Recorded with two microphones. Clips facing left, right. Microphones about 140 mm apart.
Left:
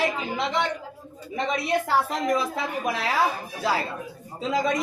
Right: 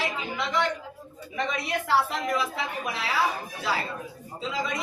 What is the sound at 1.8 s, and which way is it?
Speech, 40° left (ahead or behind).